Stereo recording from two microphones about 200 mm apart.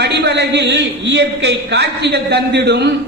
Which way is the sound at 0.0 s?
55° right (ahead or behind).